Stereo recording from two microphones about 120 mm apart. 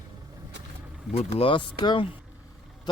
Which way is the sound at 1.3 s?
50° left (ahead or behind).